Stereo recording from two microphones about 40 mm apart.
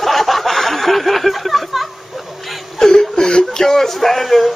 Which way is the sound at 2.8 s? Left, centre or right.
Centre.